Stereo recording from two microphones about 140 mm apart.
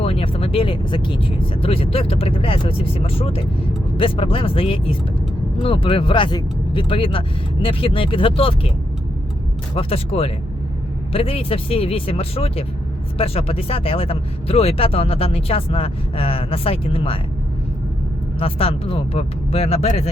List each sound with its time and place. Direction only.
0.0 s speech: 40° left (ahead or behind)
9.7 s speech: 45° left (ahead or behind)
18.3 s speech: 45° left (ahead or behind)